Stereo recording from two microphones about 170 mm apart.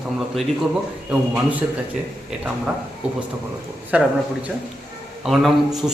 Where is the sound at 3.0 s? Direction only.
5° right (ahead or behind).